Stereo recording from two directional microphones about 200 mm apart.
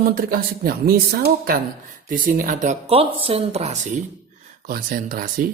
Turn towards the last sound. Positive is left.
turn(degrees=-45)  # may be behind; listen again after turning